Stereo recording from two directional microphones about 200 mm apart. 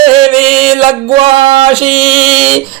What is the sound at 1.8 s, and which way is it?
Speech, 30° right (ahead or behind).